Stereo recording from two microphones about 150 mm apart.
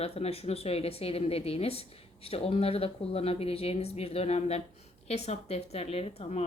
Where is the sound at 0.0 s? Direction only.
40° left (ahead or behind).